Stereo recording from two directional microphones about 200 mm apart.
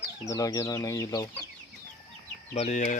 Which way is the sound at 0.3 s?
15° left (ahead or behind).